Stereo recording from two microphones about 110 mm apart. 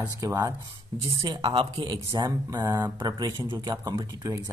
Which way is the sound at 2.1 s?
35° right (ahead or behind).